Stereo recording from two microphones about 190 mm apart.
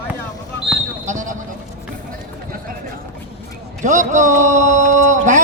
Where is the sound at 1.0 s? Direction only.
40° right (ahead or behind).